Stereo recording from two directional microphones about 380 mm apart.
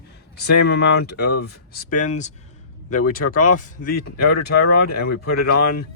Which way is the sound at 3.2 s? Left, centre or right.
Left.